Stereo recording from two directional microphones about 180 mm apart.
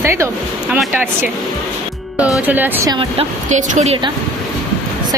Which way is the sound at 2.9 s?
30° right (ahead or behind).